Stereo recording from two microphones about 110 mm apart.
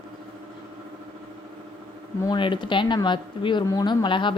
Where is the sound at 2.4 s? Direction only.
45° left (ahead or behind).